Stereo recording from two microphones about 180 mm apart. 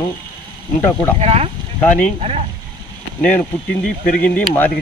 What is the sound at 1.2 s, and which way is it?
Speech, 35° right (ahead or behind).